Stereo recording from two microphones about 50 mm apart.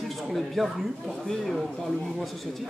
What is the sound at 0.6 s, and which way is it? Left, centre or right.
Speech, centre.